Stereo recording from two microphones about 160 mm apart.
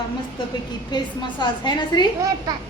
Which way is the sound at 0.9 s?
25° left (ahead or behind).